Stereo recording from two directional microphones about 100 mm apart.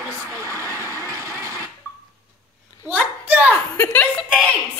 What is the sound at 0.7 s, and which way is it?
Vehicle, 30° left (ahead or behind).